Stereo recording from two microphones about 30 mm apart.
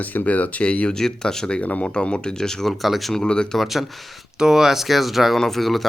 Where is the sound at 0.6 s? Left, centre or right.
Left.